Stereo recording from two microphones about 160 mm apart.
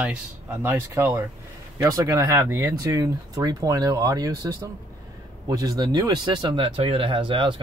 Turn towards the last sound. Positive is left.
turn(degrees=-30)  # may be behind; listen again after turning